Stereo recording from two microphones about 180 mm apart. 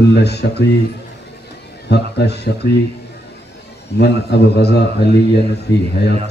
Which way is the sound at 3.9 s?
65° left (ahead or behind).